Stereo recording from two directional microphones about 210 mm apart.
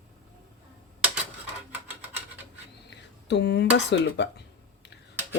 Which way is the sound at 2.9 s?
55° left (ahead or behind).